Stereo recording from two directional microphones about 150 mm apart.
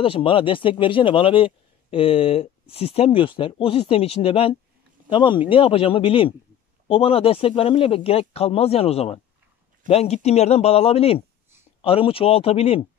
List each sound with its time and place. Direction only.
0.0 s speech: 35° left (ahead or behind)